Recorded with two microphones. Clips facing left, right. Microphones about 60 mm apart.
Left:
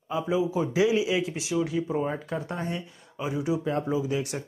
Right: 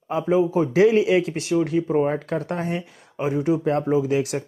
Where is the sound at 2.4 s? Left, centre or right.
Right.